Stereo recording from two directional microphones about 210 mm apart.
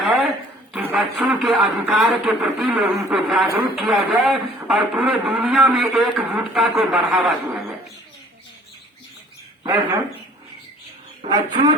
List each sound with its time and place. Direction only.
0.0 s a sound: centre (ahead or behind)
0.7 s speech: centre (ahead or behind)
11.2 s speech: 20° right (ahead or behind)